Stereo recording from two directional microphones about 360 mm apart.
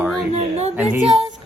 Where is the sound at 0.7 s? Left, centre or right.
Centre.